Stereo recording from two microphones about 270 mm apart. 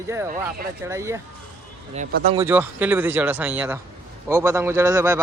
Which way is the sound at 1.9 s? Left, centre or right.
Right.